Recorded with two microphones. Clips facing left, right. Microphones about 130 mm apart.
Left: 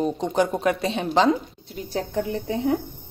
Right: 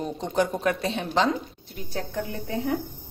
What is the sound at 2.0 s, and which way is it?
Speech, 20° left (ahead or behind).